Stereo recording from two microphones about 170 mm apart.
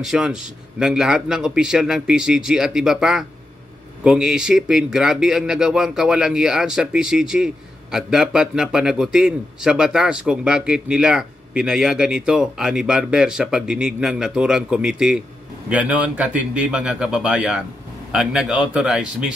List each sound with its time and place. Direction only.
0.0 s a man's voice: 5° right (ahead or behind)